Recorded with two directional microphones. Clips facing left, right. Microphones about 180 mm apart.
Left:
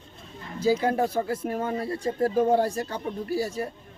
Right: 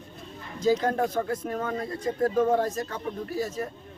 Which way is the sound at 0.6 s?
10° left (ahead or behind).